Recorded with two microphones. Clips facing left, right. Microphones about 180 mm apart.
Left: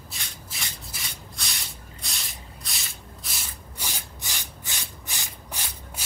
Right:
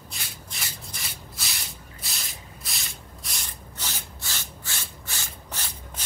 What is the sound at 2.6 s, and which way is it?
Rub, centre (ahead or behind).